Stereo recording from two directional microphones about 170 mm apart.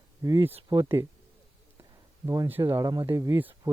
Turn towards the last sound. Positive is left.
turn(degrees=-15)  # may be behind; listen again after turning